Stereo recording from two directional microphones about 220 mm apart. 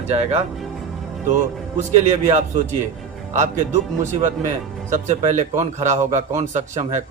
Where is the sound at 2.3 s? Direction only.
30° right (ahead or behind).